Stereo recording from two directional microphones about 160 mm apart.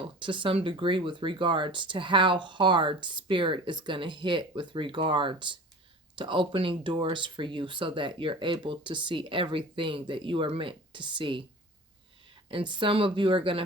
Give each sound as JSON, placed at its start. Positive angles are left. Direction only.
{"t": 0.0, "sound": "speech", "side_deg": -30}
{"t": 12.5, "sound": "speech", "side_deg": -30}